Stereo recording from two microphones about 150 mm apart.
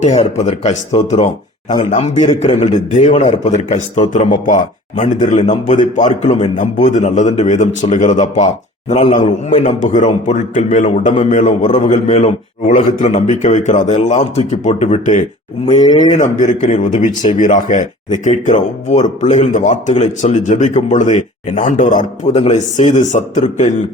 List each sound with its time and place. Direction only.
0.0 s a man's voice: 50° left (ahead or behind)